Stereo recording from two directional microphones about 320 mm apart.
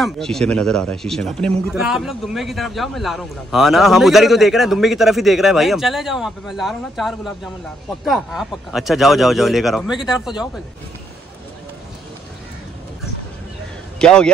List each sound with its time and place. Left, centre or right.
0.0 s a man's voice: centre
13.9 s a man's voice: centre